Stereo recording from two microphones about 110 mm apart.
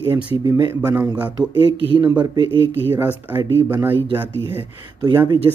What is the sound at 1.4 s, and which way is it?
Speech, 50° right (ahead or behind).